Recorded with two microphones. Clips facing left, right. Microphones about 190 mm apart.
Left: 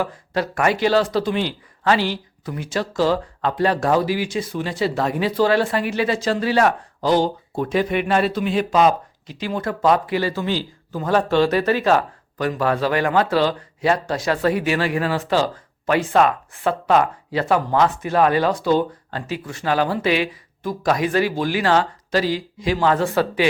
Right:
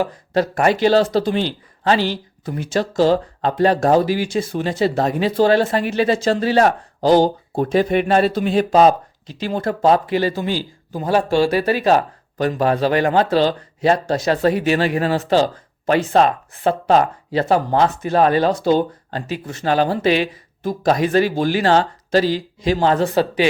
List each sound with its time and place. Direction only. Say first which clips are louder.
0.1 s speech: right 5 dB; 40° right (ahead or behind)
0.5 s speech: right 3 dB; 25° right (ahead or behind)
3.6 s speech: right 4 dB; 40° right (ahead or behind)
5.1 s speech: right 3 dB; 25° right (ahead or behind)
5.5 s speech: right 3 dB; 35° right (ahead or behind)
10.3 s speech: right 1 dB; 15° right (ahead or behind)
11.9 s a sound: right 3 dB; 30° right (ahead or behind)
12.5 s speech: right 3 dB; 20° right (ahead or behind)